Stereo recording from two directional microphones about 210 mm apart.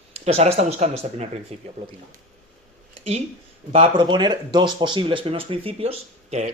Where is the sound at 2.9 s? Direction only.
30° right (ahead or behind).